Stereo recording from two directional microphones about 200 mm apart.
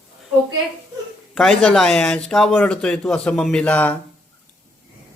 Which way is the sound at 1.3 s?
Centre (ahead or behind).